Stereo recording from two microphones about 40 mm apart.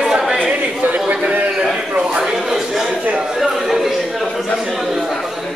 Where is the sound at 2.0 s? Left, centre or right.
Centre.